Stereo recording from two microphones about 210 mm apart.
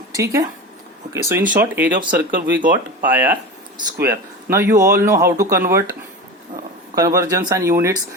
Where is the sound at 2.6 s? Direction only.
40° right (ahead or behind).